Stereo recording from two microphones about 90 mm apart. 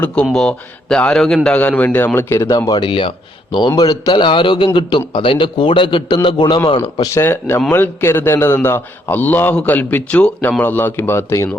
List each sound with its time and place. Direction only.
0.3 s a man's voice: 5° left (ahead or behind)
2.3 s speech: 35° left (ahead or behind)
2.6 s a man's voice: 60° left (ahead or behind)
3.8 s a man's voice: 50° left (ahead or behind); by 6.1 s 70° left (ahead or behind)
6.1 s a man's voice: 60° left (ahead or behind)
6.7 s speech: 70° left (ahead or behind)
7.1 s a man's voice: 30° left (ahead or behind)